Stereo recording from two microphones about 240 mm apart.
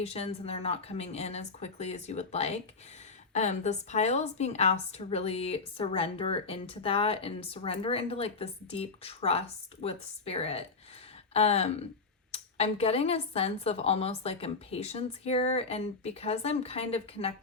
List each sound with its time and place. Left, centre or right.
0.0 s a woman's voice: left